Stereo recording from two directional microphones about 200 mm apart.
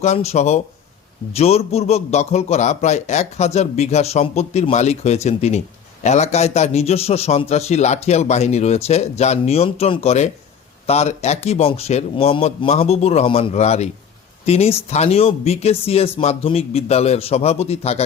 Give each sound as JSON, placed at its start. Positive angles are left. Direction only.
{"t": 0.0, "sound": "a man's voice", "side_deg": 35}